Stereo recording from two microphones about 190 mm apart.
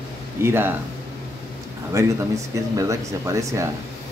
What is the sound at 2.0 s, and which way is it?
Speech, 15° right (ahead or behind).